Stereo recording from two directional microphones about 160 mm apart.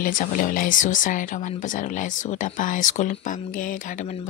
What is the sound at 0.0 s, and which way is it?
Speech, 55° left (ahead or behind).